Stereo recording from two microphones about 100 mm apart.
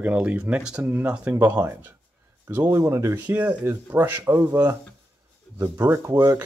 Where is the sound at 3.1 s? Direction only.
15° right (ahead or behind).